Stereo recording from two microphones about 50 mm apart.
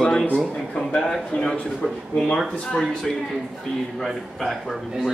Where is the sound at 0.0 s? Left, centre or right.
Centre.